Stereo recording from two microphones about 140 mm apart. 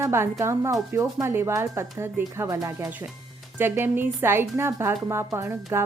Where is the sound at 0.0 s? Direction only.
20° right (ahead or behind).